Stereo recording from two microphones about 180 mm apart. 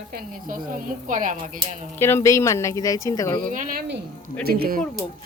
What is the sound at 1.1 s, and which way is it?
Speech, 45° right (ahead or behind).